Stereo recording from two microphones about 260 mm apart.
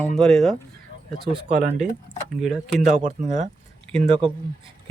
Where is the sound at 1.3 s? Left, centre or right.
Right.